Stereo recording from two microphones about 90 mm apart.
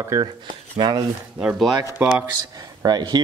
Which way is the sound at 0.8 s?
60° right (ahead or behind).